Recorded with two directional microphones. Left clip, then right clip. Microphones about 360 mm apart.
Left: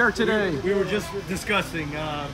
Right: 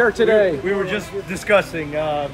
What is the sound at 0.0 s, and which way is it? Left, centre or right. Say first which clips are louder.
Speech: right 7 dB; centre.